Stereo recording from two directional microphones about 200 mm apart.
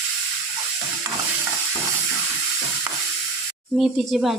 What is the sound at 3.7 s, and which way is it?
Speech, 5° right (ahead or behind).